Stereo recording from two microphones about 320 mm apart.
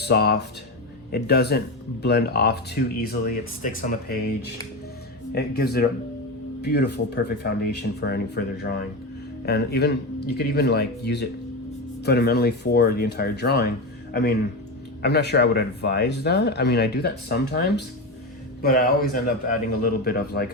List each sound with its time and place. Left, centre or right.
0.0 s speech: left
5.3 s a man's voice: left